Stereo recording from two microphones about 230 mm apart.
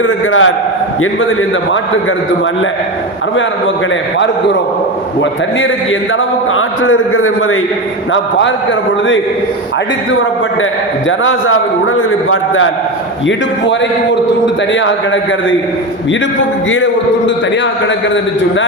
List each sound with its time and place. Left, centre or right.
0.0 s a man's voice: left
5.2 s a man's voice: left
8.1 s a sound: left
11.2 s a man's voice: left
14.4 s a man's voice: left
16.6 s a sound: left